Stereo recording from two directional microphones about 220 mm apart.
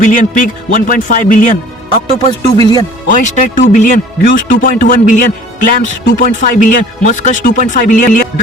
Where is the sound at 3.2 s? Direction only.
35° left (ahead or behind).